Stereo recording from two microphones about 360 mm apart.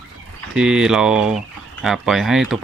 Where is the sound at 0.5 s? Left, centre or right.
Centre.